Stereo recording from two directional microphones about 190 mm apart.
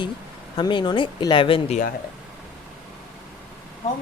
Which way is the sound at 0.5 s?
25° left (ahead or behind).